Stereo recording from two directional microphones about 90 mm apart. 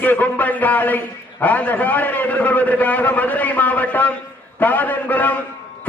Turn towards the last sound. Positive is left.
turn(degrees=20)  # may be behind; listen again after turning